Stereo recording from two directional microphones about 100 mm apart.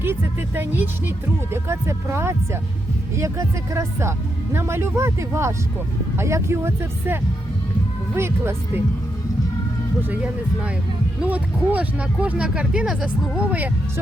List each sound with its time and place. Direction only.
0.0 s speech: 20° right (ahead or behind)
10.0 s speech: 15° right (ahead or behind)